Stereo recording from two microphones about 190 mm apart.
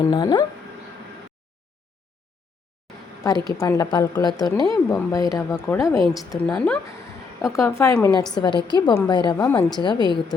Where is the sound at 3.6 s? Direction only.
15° left (ahead or behind).